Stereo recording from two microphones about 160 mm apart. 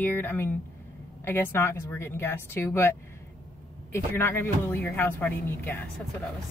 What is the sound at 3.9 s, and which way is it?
Speech, 15° left (ahead or behind).